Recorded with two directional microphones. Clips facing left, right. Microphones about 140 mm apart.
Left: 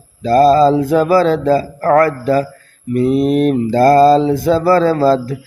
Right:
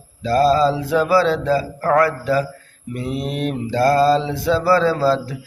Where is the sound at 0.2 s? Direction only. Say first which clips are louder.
Left 6 dB; 45° left (ahead or behind).